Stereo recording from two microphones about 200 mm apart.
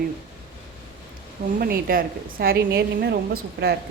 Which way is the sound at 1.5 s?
45° right (ahead or behind).